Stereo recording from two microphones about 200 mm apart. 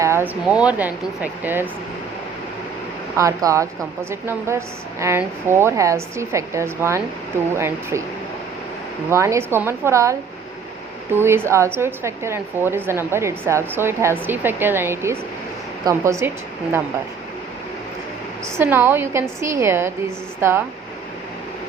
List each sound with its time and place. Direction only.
0.0 s a woman's voice: 10° right (ahead or behind)
3.2 s a woman's voice: 15° right (ahead or behind)
9.0 s a woman's voice: 15° right (ahead or behind)
18.5 s a woman's voice: 10° right (ahead or behind)